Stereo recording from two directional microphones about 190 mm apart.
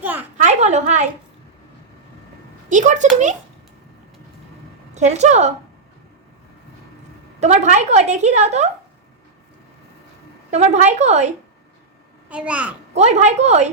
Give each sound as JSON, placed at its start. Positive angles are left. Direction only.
{"t": 0.0, "sound": "a sound", "side_deg": -10}
{"t": 0.3, "sound": "a sound", "side_deg": -40}
{"t": 2.6, "sound": "speech", "side_deg": -40}
{"t": 4.9, "sound": "a woman's voice", "side_deg": -35}
{"t": 7.3, "sound": "a woman's voice", "side_deg": -35}
{"t": 10.5, "sound": "a woman's voice", "side_deg": -35}
{"t": 12.3, "sound": "a child's voice", "side_deg": -5}
{"t": 12.9, "sound": "a woman's voice", "side_deg": -35}